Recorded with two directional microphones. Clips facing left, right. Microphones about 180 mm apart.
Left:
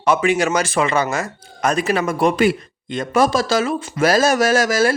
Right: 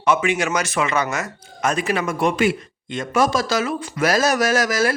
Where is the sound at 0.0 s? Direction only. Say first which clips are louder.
Left 3 dB; 35° left (ahead or behind).